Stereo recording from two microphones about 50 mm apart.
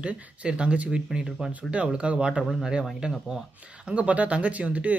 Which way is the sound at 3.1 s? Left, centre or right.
Centre.